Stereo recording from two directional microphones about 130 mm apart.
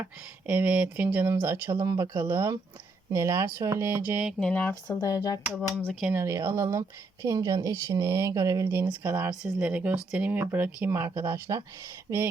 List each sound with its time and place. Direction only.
0.0 s speech: 10° right (ahead or behind)
4.4 s speech: 10° left (ahead or behind)
4.7 s speech: 30° left (ahead or behind)
5.8 s speech: 5° left (ahead or behind)
6.1 s speech: 20° right (ahead or behind)
8.9 s speech: 15° right (ahead or behind)